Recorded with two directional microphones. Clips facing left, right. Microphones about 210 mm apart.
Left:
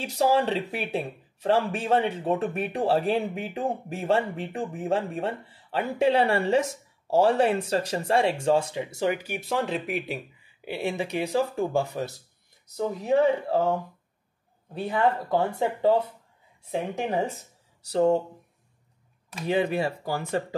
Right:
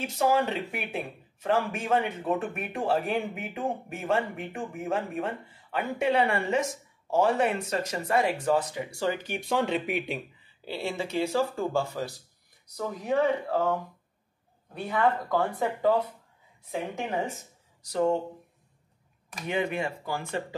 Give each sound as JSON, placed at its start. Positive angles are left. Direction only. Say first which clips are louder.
{"t": 0.0, "sound": "speech", "louder": "left 2 dB", "side_deg": 35}
{"t": 10.6, "sound": "speech", "louder": "left 3 dB", "side_deg": 15}
{"t": 19.4, "sound": "speech", "louder": "left 4 dB", "side_deg": 35}